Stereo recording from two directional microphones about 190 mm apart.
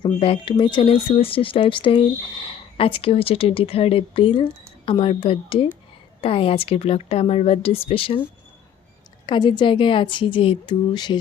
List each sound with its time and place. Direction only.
0.0 s speech: 30° left (ahead or behind)
9.2 s speech: 25° left (ahead or behind)